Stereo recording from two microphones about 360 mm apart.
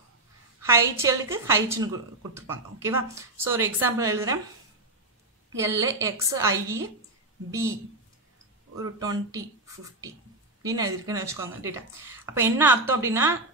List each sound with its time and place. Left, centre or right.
0.6 s a woman's voice: centre
5.6 s a woman's voice: centre
8.7 s a woman's voice: centre